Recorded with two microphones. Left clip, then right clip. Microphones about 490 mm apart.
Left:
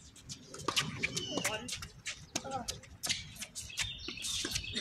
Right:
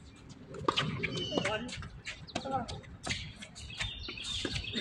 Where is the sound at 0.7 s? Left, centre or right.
Left.